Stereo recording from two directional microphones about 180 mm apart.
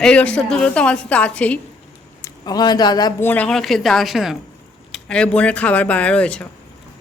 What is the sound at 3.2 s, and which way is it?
A woman's voice, 10° left (ahead or behind).